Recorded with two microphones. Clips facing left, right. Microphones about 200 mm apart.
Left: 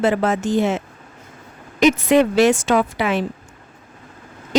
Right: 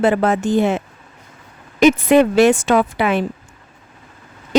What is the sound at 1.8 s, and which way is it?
Speech, 55° right (ahead or behind).